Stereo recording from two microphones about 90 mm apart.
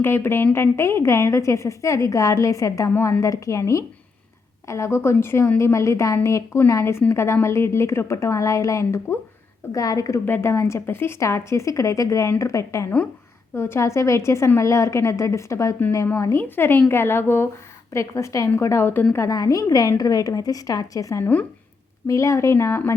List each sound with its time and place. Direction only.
0.0 s a woman's voice: 25° left (ahead or behind)
10.2 s a woman's voice: 25° left (ahead or behind)
16.4 s a woman's voice: 20° left (ahead or behind)
17.9 s a woman's voice: 35° left (ahead or behind)
19.3 s a woman's voice: 40° left (ahead or behind)